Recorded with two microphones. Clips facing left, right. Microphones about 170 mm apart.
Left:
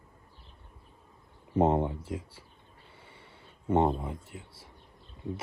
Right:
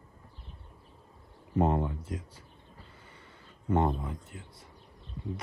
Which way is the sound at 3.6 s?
20° left (ahead or behind).